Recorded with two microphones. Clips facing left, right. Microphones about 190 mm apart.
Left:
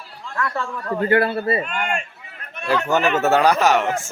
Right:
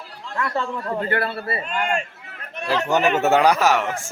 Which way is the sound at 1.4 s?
25° left (ahead or behind).